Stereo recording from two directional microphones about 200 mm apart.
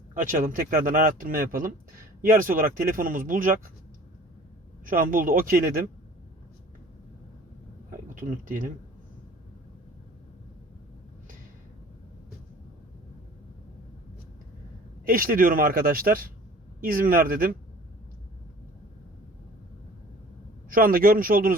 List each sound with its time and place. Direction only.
0.1 s speech: 40° right (ahead or behind)
4.9 s speech: 45° right (ahead or behind)
7.9 s a sound: 40° right (ahead or behind)
15.0 s speech: 45° right (ahead or behind)
20.7 s speech: 45° right (ahead or behind)